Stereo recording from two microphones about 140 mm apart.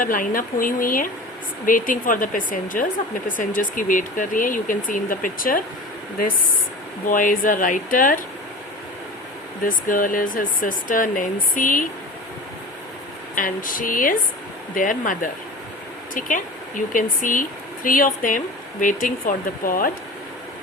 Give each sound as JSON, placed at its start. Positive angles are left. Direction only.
{"t": 0.0, "sound": "speech", "side_deg": 80}
{"t": 7.1, "sound": "speech", "side_deg": 75}
{"t": 9.6, "sound": "speech", "side_deg": 80}
{"t": 13.3, "sound": "speech", "side_deg": 80}